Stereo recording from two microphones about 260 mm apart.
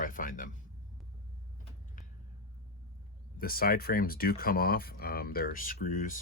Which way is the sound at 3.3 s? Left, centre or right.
Left.